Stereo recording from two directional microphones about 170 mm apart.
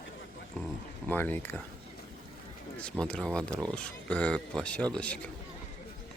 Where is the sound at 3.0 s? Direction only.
5° left (ahead or behind).